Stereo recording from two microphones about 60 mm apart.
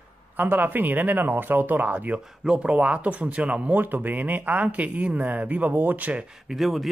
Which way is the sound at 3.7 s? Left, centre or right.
Right.